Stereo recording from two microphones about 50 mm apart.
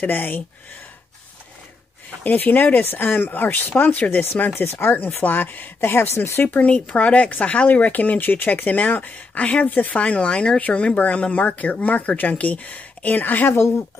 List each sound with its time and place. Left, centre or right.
0.0 s speech: left
2.2 s speech: left
4.6 s speech: left
5.8 s speech: left
6.6 s speech: left
9.9 s speech: left